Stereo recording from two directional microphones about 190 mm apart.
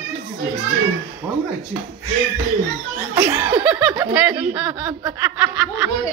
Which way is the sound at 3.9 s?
20° right (ahead or behind).